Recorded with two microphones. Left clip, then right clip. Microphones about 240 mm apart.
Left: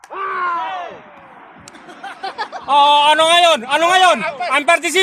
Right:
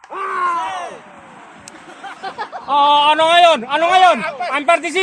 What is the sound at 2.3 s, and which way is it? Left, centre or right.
A man's voice, left.